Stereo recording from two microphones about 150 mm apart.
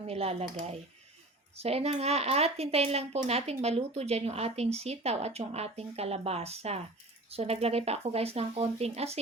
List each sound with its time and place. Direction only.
0.1 s speech: 40° right (ahead or behind)